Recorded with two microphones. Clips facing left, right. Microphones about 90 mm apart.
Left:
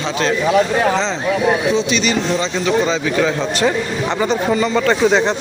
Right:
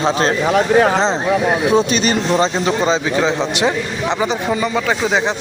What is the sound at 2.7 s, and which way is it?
Speech, 30° right (ahead or behind).